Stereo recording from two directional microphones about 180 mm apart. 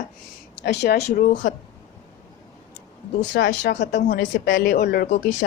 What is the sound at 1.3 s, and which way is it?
Speech, 90° left.